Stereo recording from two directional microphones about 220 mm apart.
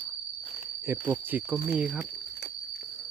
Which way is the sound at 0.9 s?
10° right (ahead or behind).